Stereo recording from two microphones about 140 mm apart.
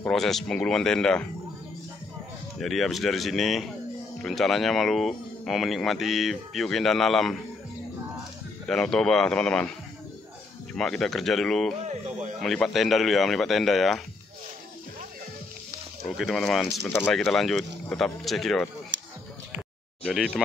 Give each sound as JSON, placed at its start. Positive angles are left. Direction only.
{"t": 0.0, "sound": "speech", "side_deg": 0}
{"t": 2.6, "sound": "speech", "side_deg": 0}
{"t": 8.6, "sound": "speech", "side_deg": 5}
{"t": 10.7, "sound": "speech", "side_deg": 5}
{"t": 11.8, "sound": "speech", "side_deg": -55}
{"t": 12.4, "sound": "speech", "side_deg": 0}
{"t": 16.1, "sound": "speech", "side_deg": 0}
{"t": 20.1, "sound": "speech", "side_deg": 0}